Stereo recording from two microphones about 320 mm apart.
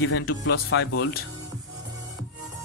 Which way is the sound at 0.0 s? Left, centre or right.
Left.